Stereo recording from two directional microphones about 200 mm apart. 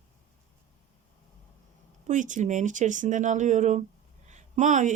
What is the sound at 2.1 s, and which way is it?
Speech, 40° right (ahead or behind).